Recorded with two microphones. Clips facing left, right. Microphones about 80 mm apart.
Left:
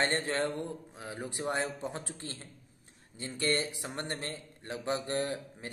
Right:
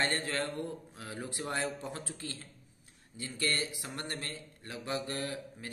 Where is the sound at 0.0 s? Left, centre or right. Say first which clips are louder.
Left 3 dB; left.